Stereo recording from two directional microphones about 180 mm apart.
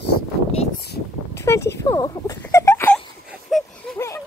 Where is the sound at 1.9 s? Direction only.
20° left (ahead or behind).